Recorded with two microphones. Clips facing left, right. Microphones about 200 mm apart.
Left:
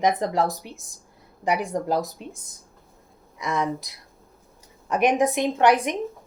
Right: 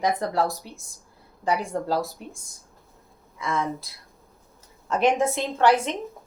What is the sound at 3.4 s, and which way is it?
Speech, 15° left (ahead or behind).